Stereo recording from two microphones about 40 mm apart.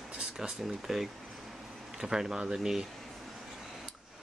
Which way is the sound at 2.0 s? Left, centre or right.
Centre.